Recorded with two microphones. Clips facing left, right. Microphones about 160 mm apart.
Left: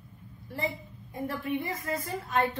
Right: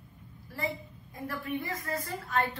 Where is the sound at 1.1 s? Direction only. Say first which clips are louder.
Left 3 dB; 25° left (ahead or behind).